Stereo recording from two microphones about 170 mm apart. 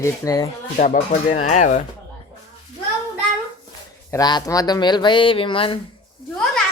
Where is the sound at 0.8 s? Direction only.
45° left (ahead or behind).